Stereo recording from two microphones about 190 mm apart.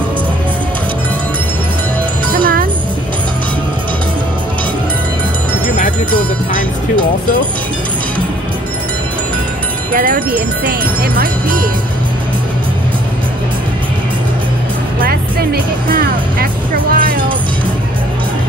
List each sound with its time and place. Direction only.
2.3 s music: 50° right (ahead or behind)
9.9 s speech: 45° right (ahead or behind)
15.0 s music: 50° right (ahead or behind)